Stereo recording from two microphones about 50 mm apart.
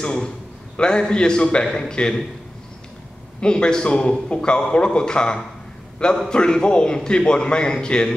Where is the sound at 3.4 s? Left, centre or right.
Centre.